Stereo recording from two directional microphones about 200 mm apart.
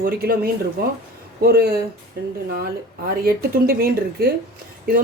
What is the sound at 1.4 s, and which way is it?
Speech, 50° right (ahead or behind).